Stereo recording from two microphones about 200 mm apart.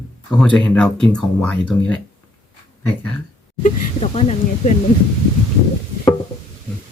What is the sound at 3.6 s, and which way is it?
Speech, 30° left (ahead or behind).